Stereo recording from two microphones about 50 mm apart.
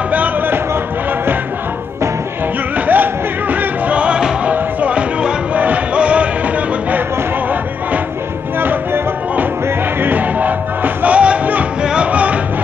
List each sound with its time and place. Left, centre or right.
0.1 s music: right
2.9 s music: right
8.5 s music: right
11.8 s music: centre
12.1 s music: right